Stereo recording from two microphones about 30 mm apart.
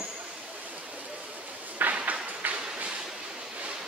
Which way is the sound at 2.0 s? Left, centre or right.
Right.